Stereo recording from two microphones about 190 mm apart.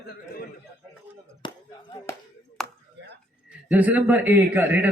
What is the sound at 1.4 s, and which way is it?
Speech, 20° left (ahead or behind).